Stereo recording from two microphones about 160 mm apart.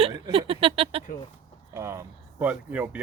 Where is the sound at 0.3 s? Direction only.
35° right (ahead or behind).